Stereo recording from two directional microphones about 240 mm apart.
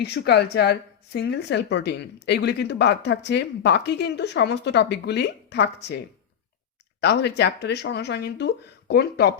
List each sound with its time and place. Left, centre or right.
0.0 s a woman's voice: left
7.0 s a woman's voice: left